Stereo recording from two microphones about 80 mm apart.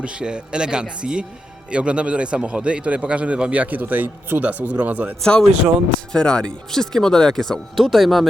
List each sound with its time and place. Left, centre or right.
0.0 s a man's voice: centre
5.2 s speech: centre